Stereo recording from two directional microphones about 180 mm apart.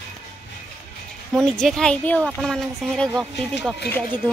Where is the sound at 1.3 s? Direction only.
5° left (ahead or behind).